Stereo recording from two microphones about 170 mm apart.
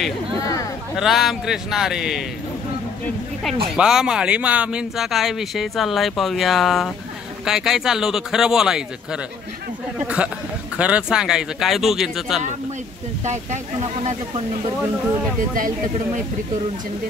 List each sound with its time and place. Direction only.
0.4 s a sound: 20° left (ahead or behind)
0.9 s speech: centre (ahead or behind)
3.7 s speech: 5° right (ahead or behind)
13.2 s speech: 45° right (ahead or behind)